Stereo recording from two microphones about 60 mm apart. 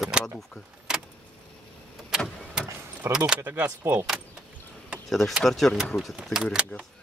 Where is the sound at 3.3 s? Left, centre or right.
Right.